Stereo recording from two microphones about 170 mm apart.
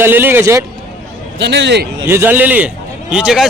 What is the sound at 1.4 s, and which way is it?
Speech, 90° right.